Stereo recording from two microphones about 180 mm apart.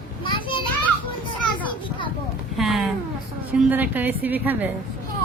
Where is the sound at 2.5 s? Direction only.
Centre (ahead or behind).